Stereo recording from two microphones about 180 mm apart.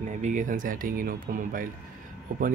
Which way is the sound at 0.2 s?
45° right (ahead or behind).